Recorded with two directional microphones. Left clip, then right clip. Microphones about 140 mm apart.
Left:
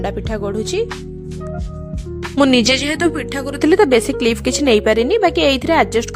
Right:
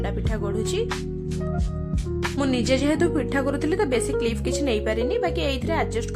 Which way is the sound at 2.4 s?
90° left.